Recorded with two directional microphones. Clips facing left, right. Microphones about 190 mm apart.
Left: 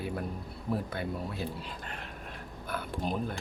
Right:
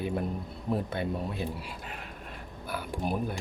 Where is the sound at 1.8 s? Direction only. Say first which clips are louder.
Right 1 dB; 5° right (ahead or behind).